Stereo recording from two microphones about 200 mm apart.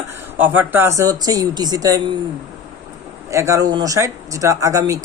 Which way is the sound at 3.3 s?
15° right (ahead or behind).